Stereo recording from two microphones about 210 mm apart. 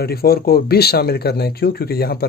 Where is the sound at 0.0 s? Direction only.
45° left (ahead or behind).